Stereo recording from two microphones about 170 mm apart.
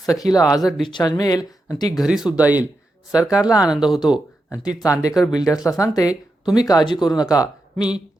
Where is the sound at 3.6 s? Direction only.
5° right (ahead or behind).